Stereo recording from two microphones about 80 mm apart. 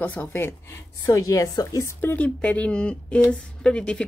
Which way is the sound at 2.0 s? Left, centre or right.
Left.